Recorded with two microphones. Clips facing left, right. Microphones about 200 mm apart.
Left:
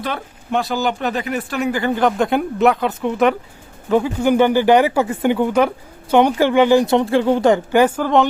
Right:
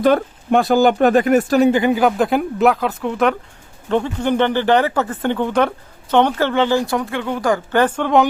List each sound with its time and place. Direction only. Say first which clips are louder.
0.0 s speech: right 11 dB; 50° right (ahead or behind)
1.7 s speech: right 2 dB; 15° right (ahead or behind); by 7.6 s 25° left (ahead or behind)
7.7 s speech: left 1 dB; 10° left (ahead or behind)